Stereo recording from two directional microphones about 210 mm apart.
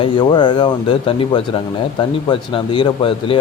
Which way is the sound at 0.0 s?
20° left (ahead or behind).